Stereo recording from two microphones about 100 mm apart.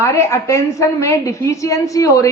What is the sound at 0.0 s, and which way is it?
A woman's voice, 30° left (ahead or behind).